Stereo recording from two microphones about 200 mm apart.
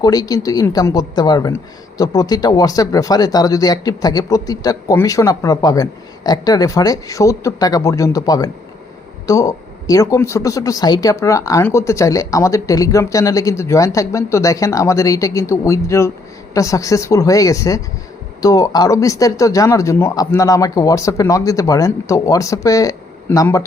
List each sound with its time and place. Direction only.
0.0 s speech: 20° left (ahead or behind)